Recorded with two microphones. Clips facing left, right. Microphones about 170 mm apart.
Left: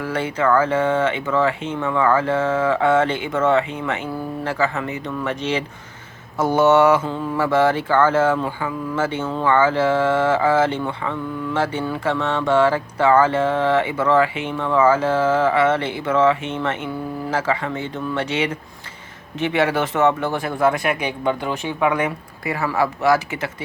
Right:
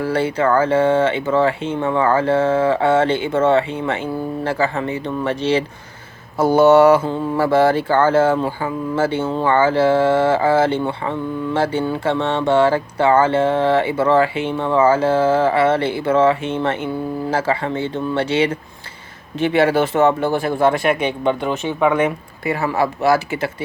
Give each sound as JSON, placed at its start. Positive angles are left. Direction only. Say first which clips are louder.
{"t": 0.0, "sound": "speech", "louder": "right 3 dB", "side_deg": -30}